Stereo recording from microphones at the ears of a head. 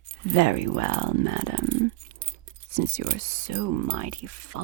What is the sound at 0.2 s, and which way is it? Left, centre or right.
Speech, right.